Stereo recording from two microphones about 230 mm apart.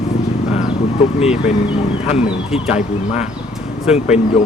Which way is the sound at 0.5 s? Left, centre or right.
Left.